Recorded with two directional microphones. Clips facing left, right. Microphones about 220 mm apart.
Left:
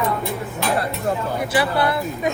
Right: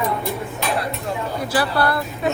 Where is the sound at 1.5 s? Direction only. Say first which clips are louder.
Even; 20° left (ahead or behind).